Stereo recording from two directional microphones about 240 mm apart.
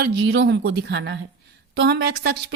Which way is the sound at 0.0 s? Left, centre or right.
Right.